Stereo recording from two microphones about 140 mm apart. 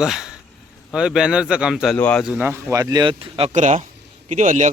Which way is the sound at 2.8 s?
30° right (ahead or behind).